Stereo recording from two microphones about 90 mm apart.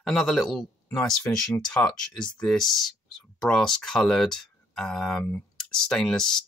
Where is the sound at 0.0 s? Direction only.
Centre (ahead or behind).